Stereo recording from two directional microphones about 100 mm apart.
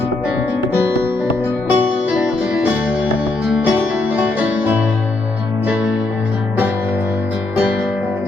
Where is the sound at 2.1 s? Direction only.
10° right (ahead or behind).